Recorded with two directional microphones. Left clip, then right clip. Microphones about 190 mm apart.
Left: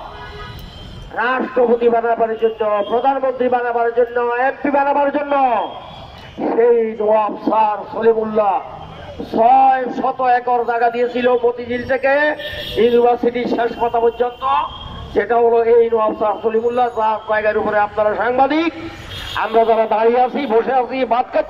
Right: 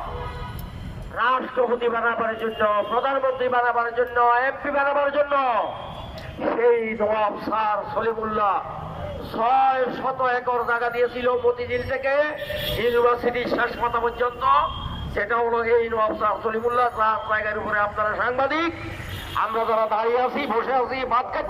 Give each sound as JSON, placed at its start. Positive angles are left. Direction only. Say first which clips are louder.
{"t": 1.1, "sound": "a man's voice", "louder": "left 4 dB", "side_deg": 50}